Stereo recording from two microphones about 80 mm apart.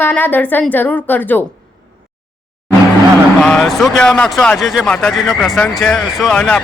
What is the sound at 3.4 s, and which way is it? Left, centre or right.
Speech, centre.